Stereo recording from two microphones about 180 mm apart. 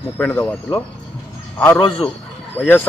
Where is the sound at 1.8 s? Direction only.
30° left (ahead or behind).